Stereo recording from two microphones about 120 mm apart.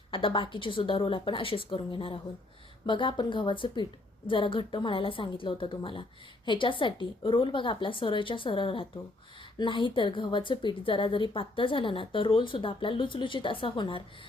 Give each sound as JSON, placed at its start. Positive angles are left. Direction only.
{"t": 0.1, "sound": "speech", "side_deg": 45}